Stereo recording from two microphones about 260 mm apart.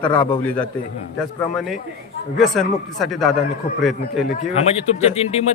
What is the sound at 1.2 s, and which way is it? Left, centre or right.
A man's voice, centre.